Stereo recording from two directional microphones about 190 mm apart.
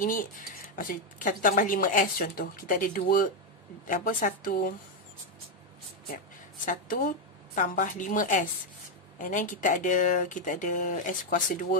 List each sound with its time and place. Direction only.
0.0 s speech: 45° left (ahead or behind)
6.1 s a woman's voice: 45° left (ahead or behind)